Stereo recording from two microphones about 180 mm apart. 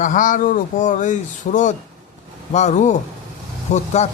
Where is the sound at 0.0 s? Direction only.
45° left (ahead or behind).